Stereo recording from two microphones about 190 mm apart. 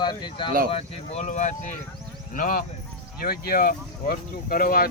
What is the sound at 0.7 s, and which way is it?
Speech, 35° left (ahead or behind).